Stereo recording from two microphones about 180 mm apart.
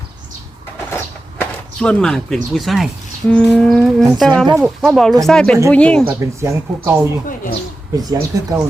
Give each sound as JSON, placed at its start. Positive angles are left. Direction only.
{"t": 0.9, "sound": "a woman's voice", "side_deg": 10}
{"t": 6.1, "sound": "speech", "side_deg": -15}